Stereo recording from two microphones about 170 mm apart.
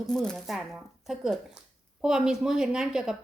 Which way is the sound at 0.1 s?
5° left (ahead or behind).